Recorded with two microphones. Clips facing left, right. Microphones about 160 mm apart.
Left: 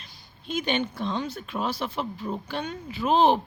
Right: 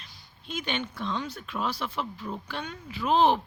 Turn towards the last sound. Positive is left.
turn(degrees=30)  # may be behind; listen again after turning